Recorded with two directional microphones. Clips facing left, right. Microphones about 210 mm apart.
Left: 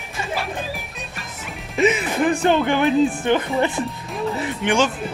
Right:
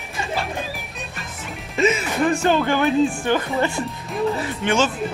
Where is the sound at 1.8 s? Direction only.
15° left (ahead or behind).